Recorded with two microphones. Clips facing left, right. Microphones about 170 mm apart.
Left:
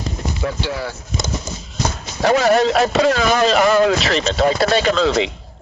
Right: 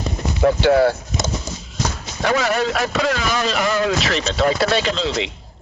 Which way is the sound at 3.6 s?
55° left (ahead or behind).